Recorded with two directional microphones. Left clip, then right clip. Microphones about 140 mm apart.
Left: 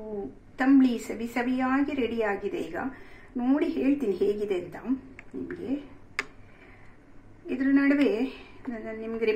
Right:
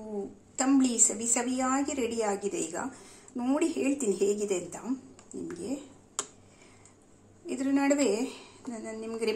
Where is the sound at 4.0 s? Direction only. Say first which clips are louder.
Left 1 dB; 10° right (ahead or behind).